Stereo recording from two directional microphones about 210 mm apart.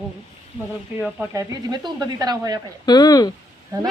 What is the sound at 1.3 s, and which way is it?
Speech, 20° right (ahead or behind).